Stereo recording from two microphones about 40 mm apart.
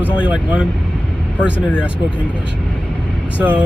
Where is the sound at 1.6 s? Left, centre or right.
Left.